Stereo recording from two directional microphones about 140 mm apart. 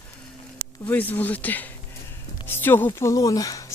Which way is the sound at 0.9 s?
10° left (ahead or behind).